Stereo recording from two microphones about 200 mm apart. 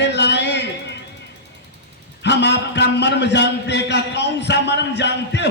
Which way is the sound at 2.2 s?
60° left (ahead or behind).